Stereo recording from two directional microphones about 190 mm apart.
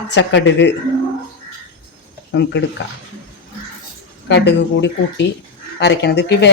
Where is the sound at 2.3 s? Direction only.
65° left (ahead or behind).